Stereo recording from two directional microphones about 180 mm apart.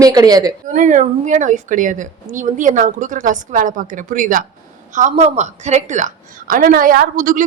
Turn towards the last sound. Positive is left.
turn(degrees=-50)  # may be behind; listen again after turning